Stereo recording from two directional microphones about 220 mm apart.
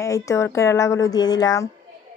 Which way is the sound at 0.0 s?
15° left (ahead or behind).